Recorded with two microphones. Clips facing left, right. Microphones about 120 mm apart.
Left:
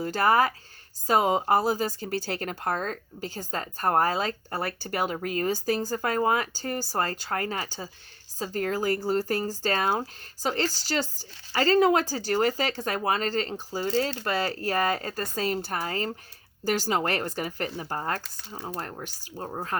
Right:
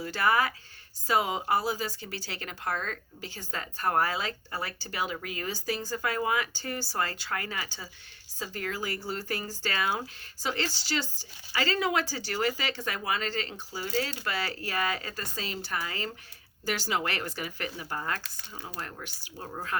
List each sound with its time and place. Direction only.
0.0 s speech: 40° left (ahead or behind)
13.8 s speech: 30° left (ahead or behind)
14.3 s speech: 40° left (ahead or behind)